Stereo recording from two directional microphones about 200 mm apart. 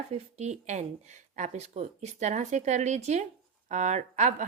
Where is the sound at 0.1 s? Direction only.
35° right (ahead or behind).